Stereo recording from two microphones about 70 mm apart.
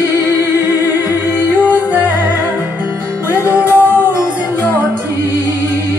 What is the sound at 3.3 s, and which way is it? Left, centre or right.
Music, left.